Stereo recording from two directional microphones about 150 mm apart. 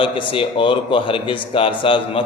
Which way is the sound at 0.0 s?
35° left (ahead or behind).